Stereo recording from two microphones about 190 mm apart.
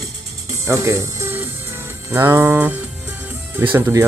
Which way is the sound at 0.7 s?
15° right (ahead or behind).